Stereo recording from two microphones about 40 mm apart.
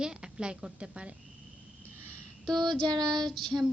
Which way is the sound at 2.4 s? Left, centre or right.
Centre.